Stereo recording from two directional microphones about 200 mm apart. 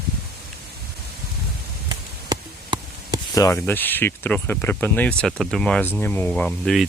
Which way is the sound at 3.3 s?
15° left (ahead or behind).